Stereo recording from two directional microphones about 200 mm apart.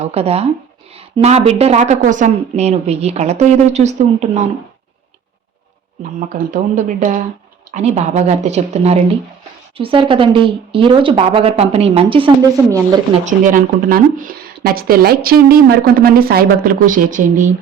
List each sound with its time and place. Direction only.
0.0 s a woman's voice: 30° right (ahead or behind)
6.1 s a woman's voice: 40° right (ahead or behind)
13.2 s speech: 40° right (ahead or behind)